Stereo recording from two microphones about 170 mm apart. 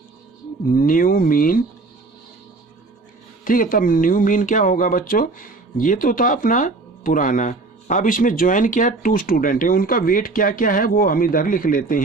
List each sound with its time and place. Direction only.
0.7 s speech: 55° left (ahead or behind)
3.4 s speech: 55° left (ahead or behind)